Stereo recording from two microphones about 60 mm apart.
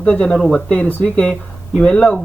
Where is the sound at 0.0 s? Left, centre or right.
Left.